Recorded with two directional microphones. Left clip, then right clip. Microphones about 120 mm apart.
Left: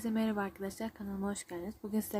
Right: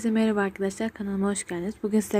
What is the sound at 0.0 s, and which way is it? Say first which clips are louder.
Speech: right 10 dB; 30° right (ahead or behind).